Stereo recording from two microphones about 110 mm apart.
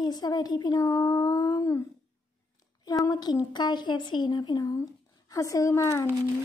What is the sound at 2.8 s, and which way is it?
Speech, 30° left (ahead or behind).